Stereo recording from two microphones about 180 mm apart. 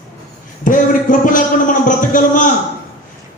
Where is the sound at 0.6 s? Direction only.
45° left (ahead or behind).